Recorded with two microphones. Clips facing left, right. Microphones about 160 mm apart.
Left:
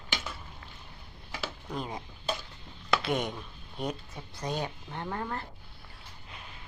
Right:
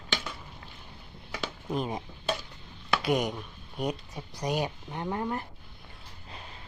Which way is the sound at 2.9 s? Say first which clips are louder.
Right 2 dB; 15° right (ahead or behind).